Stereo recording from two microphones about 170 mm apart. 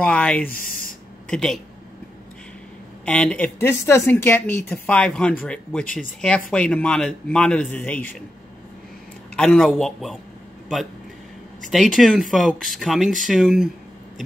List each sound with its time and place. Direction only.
0.0 s speech: 5° left (ahead or behind)
0.5 s a sound: 55° left (ahead or behind)
1.3 s speech: 5° left (ahead or behind)
3.1 s speech: 5° left (ahead or behind)
9.4 s speech: 5° left (ahead or behind)
11.6 s speech: centre (ahead or behind)